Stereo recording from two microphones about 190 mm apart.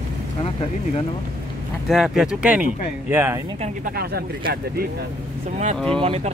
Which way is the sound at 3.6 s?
50° right (ahead or behind).